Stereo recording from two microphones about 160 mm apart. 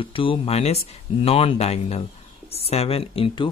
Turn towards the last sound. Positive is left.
turn(degrees=35)  # may be behind; listen again after turning